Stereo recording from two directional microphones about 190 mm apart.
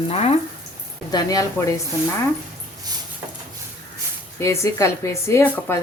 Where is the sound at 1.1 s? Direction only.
20° left (ahead or behind).